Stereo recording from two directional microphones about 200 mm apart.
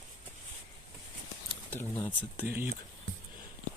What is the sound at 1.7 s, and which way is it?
Speech, 10° left (ahead or behind).